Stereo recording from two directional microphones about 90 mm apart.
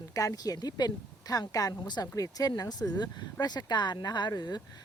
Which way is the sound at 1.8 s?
50° left (ahead or behind).